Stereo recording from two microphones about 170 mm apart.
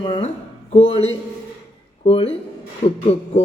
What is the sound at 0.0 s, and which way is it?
A man's voice, 30° left (ahead or behind).